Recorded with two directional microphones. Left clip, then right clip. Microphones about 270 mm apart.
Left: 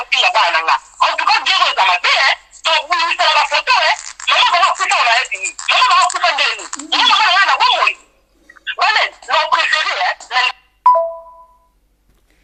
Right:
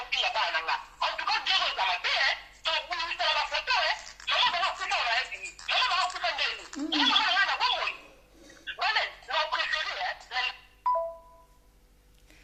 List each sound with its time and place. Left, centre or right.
0.0 s telephone: left